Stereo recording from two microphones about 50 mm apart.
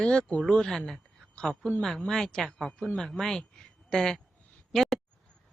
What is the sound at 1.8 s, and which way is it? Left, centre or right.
A woman's voice, centre.